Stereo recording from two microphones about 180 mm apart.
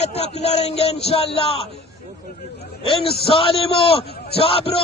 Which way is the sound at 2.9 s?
30° left (ahead or behind).